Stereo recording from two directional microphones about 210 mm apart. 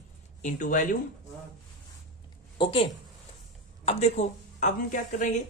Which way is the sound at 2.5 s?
25° left (ahead or behind).